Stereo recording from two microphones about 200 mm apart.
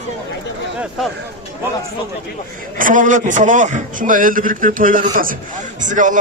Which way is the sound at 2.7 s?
40° right (ahead or behind).